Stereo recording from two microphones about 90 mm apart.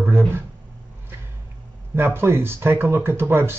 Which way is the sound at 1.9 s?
25° right (ahead or behind).